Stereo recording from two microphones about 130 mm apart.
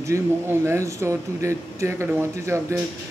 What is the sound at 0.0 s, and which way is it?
Speech, 20° right (ahead or behind).